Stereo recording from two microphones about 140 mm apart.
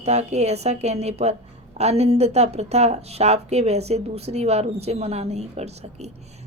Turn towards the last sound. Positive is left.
turn(degrees=-50)  # may be behind; listen again after turning